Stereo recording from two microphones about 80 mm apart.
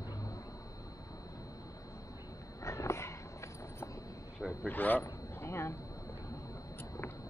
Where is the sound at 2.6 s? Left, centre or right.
Left.